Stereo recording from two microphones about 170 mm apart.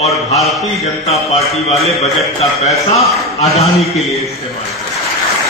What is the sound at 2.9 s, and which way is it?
Speech, 35° left (ahead or behind).